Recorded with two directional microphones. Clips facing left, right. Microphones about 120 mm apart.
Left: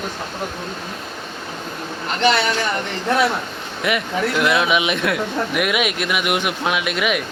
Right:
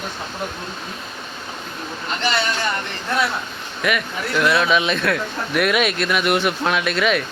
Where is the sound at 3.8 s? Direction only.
20° left (ahead or behind).